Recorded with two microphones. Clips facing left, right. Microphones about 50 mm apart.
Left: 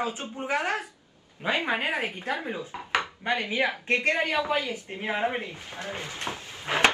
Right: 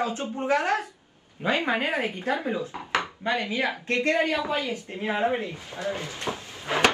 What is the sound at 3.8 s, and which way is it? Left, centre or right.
Speech, left.